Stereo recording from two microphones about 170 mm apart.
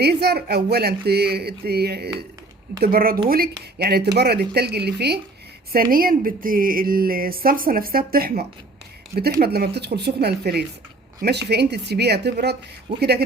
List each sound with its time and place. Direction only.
0.0 s speech: 70° right (ahead or behind)
5.9 s speech: 55° right (ahead or behind)